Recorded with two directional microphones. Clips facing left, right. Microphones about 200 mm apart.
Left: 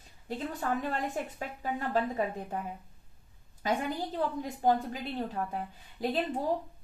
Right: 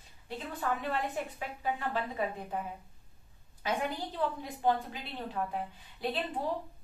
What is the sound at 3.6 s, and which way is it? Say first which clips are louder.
A woman's voice: left 2 dB; 40° left (ahead or behind).